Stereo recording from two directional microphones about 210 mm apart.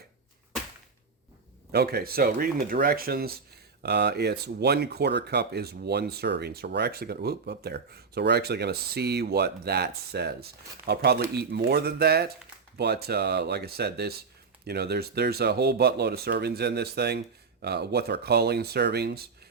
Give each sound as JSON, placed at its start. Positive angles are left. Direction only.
{"t": 1.7, "sound": "speech", "side_deg": -50}